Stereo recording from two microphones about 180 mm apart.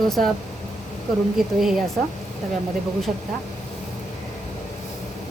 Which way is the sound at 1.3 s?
Centre (ahead or behind).